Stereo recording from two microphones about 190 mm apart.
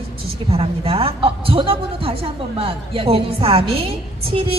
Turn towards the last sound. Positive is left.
turn(degrees=-30)  # may be behind; listen again after turning